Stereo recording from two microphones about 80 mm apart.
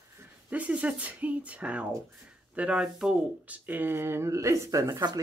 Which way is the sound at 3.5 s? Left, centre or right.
Right.